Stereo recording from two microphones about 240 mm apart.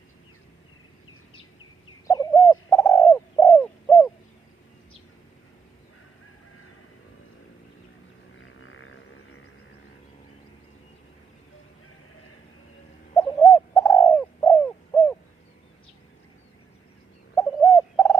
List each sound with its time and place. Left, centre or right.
2.0 s bird: centre
8.5 s didgeridoo: left
13.1 s bird: centre
17.3 s bird: centre